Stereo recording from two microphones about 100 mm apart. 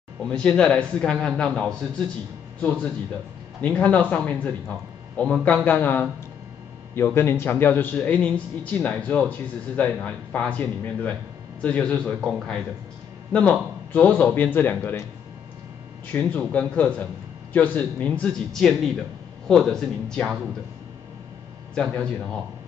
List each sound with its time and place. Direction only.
0.2 s a man's voice: 10° left (ahead or behind)
3.6 s a man's voice: 15° left (ahead or behind)
16.1 s a man's voice: 15° left (ahead or behind)
21.9 s a man's voice: 10° left (ahead or behind)